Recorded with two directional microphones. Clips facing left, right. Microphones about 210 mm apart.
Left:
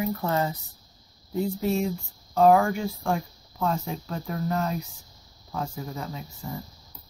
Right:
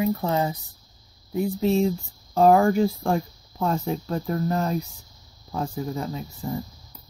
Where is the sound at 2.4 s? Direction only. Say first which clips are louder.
Right 2 dB; 35° right (ahead or behind).